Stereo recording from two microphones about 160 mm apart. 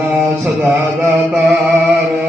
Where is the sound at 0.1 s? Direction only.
10° right (ahead or behind).